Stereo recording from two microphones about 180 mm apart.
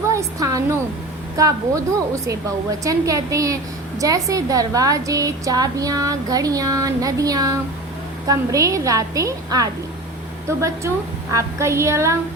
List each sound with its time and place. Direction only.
0.1 s a woman's voice: 20° right (ahead or behind)
11.3 s a woman's voice: 15° right (ahead or behind)